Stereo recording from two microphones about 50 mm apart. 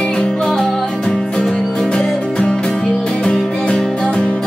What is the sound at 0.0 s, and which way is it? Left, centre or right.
Music, centre.